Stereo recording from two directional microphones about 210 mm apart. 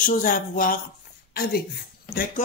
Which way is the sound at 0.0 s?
40° left (ahead or behind).